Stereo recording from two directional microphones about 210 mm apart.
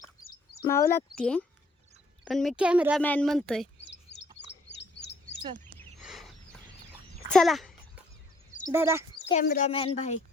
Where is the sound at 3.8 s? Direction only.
55° left (ahead or behind).